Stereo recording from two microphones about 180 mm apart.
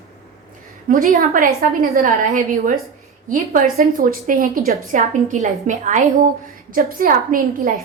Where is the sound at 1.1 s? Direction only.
55° right (ahead or behind).